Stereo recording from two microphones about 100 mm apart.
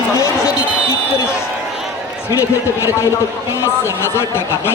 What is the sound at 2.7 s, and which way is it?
Speech, 25° left (ahead or behind).